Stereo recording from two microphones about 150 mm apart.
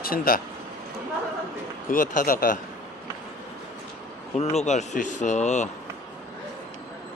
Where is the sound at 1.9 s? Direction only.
60° left (ahead or behind).